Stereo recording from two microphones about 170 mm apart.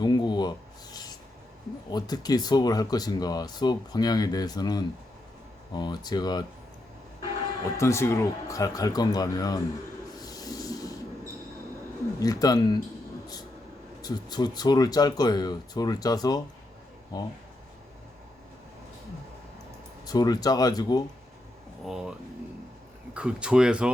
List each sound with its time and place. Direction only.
0.0 s a sound: 25° left (ahead or behind)
1.9 s speech: 25° left (ahead or behind)
7.8 s speech: 15° left (ahead or behind)
10.2 s train: 20° left (ahead or behind)
12.2 s speech: 20° left (ahead or behind)
14.0 s speech: 25° left (ahead or behind)
20.1 s speech: 25° left (ahead or behind)
21.8 s speech: 5° right (ahead or behind)
23.1 s speech: 5° right (ahead or behind)